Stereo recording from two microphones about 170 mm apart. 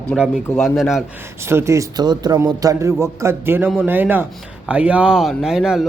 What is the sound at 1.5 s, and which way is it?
A man's voice, 15° right (ahead or behind).